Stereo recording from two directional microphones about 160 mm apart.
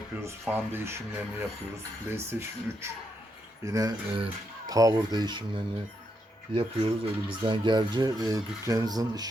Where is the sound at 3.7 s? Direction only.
20° right (ahead or behind).